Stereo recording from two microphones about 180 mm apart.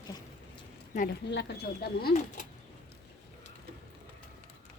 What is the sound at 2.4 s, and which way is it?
Bird, 45° left (ahead or behind).